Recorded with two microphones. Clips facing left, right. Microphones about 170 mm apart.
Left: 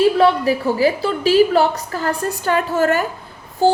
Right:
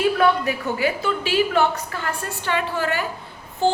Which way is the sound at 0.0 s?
35° left (ahead or behind).